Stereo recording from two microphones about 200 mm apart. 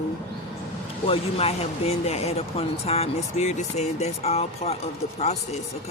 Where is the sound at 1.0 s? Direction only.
30° left (ahead or behind).